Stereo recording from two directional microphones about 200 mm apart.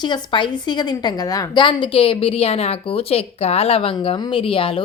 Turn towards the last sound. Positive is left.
turn(degrees=25)  # may be behind; listen again after turning